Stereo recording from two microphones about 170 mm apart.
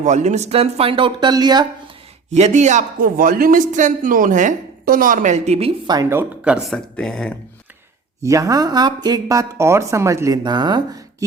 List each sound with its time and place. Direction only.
0.0 s speech: 45° right (ahead or behind); by 1.6 s 25° right (ahead or behind)
2.3 s speech: 45° right (ahead or behind)
5.9 s speech: 15° right (ahead or behind); by 7.3 s 5° left (ahead or behind)
8.2 s speech: 20° right (ahead or behind)